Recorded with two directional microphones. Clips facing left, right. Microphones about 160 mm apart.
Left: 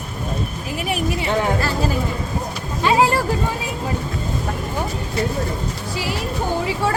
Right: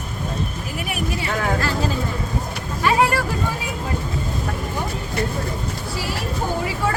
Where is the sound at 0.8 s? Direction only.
25° left (ahead or behind).